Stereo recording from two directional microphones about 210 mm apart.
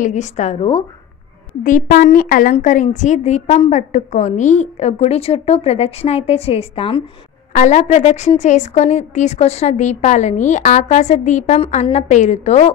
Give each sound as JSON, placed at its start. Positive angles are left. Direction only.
{"t": 0.0, "sound": "a woman's voice", "side_deg": 35}
{"t": 1.6, "sound": "a woman's voice", "side_deg": 40}